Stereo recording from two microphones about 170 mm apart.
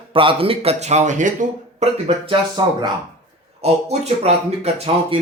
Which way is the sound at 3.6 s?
40° right (ahead or behind).